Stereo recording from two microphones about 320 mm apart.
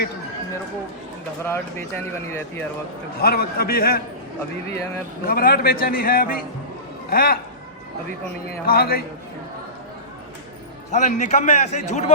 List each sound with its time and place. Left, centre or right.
1.5 s speech: centre
3.2 s a man's voice: left
5.2 s a man's voice: left
8.6 s a man's voice: left
10.9 s a man's voice: left